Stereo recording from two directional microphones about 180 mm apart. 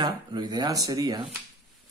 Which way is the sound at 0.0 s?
25° right (ahead or behind).